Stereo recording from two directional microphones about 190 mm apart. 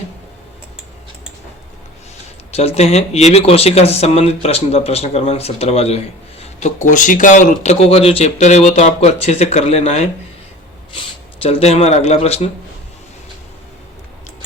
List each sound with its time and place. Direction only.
2.5 s speech: 35° left (ahead or behind)